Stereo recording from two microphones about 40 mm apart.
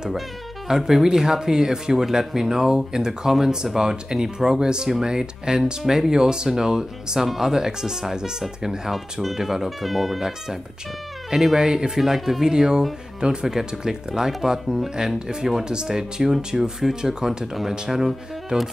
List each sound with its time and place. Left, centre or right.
0.7 s speech: centre
8.9 s speech: centre
11.2 s speech: centre
12.0 s speech: centre